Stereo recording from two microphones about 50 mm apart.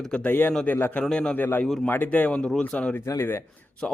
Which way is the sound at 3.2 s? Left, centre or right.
Left.